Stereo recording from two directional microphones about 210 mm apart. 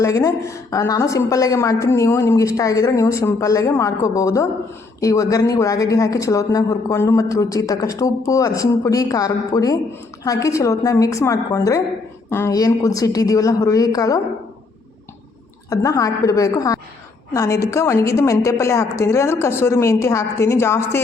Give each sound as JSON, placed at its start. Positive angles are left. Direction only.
{"t": 0.0, "sound": "speech", "side_deg": 15}
{"t": 15.7, "sound": "speech", "side_deg": 15}